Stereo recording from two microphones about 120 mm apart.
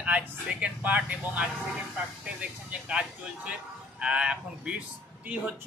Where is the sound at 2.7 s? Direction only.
10° right (ahead or behind).